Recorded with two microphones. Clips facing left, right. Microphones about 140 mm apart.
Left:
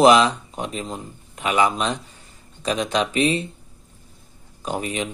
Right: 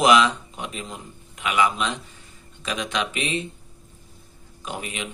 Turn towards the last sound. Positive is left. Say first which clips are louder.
# left 6 dB
turn(degrees=35)  # may be behind; listen again after turning